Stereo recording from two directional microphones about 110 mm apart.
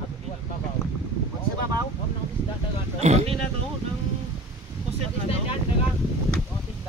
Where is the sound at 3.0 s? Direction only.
85° right.